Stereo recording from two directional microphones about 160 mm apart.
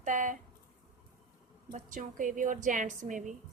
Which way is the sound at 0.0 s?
50° right (ahead or behind).